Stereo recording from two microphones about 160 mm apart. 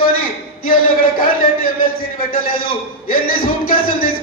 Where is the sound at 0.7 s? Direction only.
60° left (ahead or behind).